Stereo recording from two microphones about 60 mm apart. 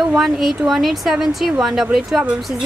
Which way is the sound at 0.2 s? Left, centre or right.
Centre.